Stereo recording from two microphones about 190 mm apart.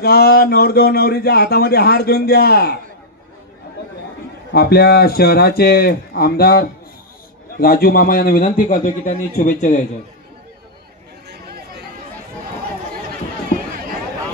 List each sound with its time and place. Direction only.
0.0 s speech: 55° left (ahead or behind)
4.5 s speech: 55° left (ahead or behind)
7.6 s a man's voice: 55° left (ahead or behind)
11.2 s chatter: 55° right (ahead or behind)